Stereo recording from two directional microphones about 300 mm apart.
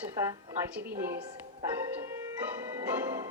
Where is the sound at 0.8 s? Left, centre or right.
Centre.